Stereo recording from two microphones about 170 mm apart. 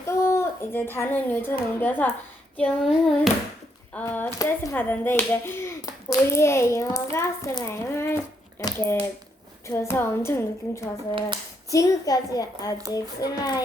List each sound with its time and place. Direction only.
0.0 s speech: 15° left (ahead or behind)
2.6 s hands: 5° left (ahead or behind)
3.9 s a woman's voice: 10° left (ahead or behind)